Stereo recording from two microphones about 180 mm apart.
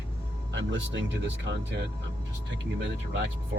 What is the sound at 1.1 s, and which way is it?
Speech, 85° right.